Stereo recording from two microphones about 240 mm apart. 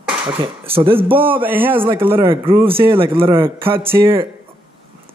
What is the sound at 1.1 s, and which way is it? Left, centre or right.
Speech, centre.